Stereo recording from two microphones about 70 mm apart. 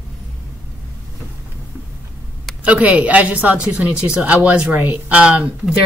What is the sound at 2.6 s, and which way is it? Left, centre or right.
Speech, centre.